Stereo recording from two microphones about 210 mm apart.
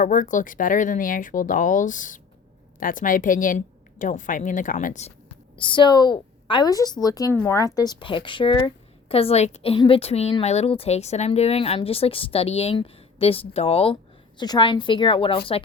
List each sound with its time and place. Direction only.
0.0 s a woman's voice: 40° left (ahead or behind)